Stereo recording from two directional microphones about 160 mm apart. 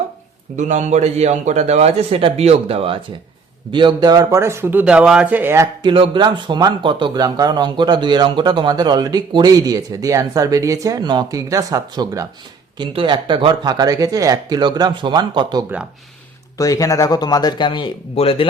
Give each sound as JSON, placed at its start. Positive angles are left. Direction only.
{"t": 0.5, "sound": "a man's voice", "side_deg": -50}
{"t": 5.8, "sound": "speech", "side_deg": -30}
{"t": 12.8, "sound": "speech", "side_deg": -30}
{"t": 16.6, "sound": "speech", "side_deg": 20}